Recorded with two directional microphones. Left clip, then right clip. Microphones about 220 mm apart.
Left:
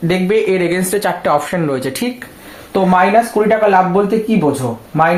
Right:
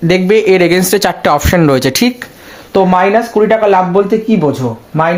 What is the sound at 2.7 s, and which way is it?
Speech, 40° right (ahead or behind).